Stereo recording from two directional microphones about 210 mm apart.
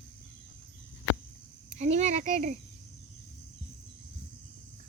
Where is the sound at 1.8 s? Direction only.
35° right (ahead or behind).